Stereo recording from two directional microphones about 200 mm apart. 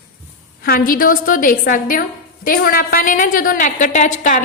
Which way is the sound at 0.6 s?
45° left (ahead or behind).